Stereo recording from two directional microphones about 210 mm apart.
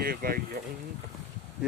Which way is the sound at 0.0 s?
45° right (ahead or behind).